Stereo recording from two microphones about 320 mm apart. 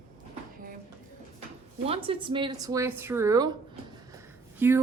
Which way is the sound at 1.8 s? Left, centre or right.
Centre.